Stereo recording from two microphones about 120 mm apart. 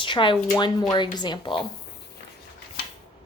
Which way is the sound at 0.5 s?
30° left (ahead or behind).